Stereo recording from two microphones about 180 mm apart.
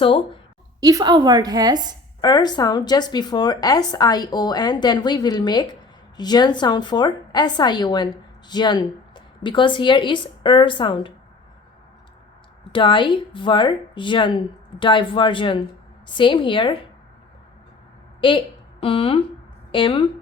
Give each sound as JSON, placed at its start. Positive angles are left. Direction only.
{"t": 0.8, "sound": "a woman's voice", "side_deg": -20}
{"t": 2.2, "sound": "a woman's voice", "side_deg": 25}
{"t": 12.7, "sound": "a woman's voice", "side_deg": 25}
{"t": 18.2, "sound": "a woman's voice", "side_deg": 25}